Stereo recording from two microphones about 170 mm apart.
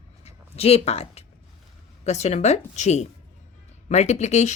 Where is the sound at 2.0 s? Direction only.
40° left (ahead or behind).